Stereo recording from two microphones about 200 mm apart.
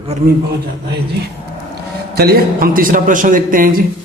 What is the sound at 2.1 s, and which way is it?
A man's voice, 50° right (ahead or behind).